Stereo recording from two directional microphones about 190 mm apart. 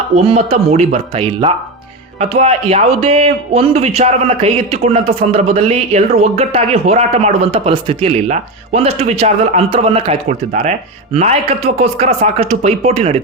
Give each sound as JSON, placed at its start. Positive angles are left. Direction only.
{"t": 0.2, "sound": "speech", "side_deg": -30}